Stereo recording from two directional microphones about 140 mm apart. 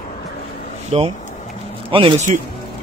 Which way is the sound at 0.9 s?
45° right (ahead or behind).